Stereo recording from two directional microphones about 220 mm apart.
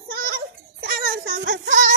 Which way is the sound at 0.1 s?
45° right (ahead or behind).